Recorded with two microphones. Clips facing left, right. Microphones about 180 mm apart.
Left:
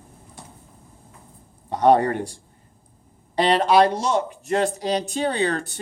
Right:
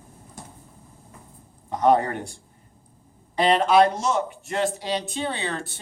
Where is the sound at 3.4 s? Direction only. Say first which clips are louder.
Left 1 dB; 35° left (ahead or behind).